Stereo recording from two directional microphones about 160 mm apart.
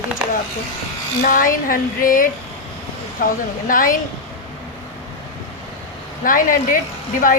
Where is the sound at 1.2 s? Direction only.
60° left (ahead or behind).